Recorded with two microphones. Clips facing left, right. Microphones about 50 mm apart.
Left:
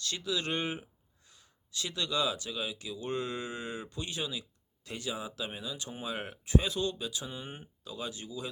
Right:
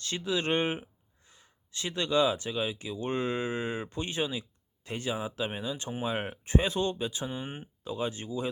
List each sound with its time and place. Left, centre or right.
0.0 s speech: right